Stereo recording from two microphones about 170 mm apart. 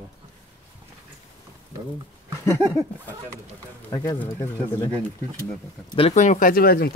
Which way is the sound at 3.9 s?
20° left (ahead or behind).